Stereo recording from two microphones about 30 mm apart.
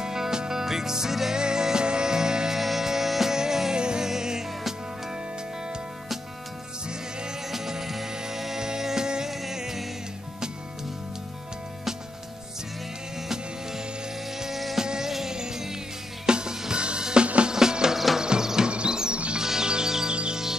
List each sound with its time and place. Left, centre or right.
0.0 s music: centre
2.5 s music: centre
3.7 s music: right
7.5 s music: centre
9.3 s music: centre
14.8 s music: centre
17.9 s music: centre
18.2 s music: right
18.7 s music: right
19.3 s music: right